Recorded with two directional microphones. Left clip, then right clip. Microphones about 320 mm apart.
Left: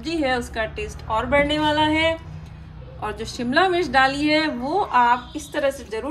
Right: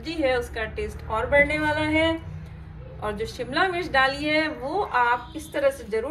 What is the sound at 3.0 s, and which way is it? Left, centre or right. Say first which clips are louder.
A woman's voice: left 1 dB; left.